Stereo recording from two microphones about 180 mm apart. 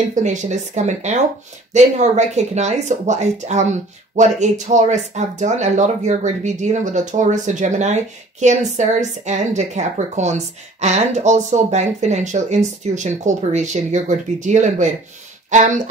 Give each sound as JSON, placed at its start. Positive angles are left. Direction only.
{"t": 0.1, "sound": "speech", "side_deg": -40}